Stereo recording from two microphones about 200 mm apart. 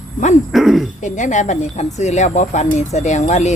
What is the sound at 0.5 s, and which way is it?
Speech, centre (ahead or behind).